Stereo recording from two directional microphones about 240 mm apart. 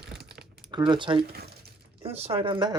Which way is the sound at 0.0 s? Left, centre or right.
Centre.